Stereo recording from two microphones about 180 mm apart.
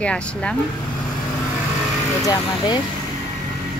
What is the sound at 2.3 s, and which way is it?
Speech, 25° left (ahead or behind).